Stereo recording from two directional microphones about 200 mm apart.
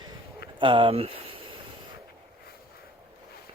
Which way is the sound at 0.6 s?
25° right (ahead or behind).